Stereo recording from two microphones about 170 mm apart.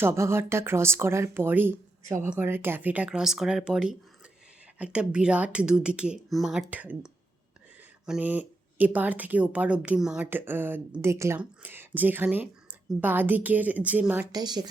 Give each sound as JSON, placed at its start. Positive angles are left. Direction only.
{"t": 0.0, "sound": "speech", "side_deg": -15}
{"t": 14.3, "sound": "a woman's voice", "side_deg": -25}